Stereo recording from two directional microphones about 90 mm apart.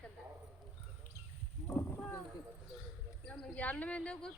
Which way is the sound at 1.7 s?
30° left (ahead or behind).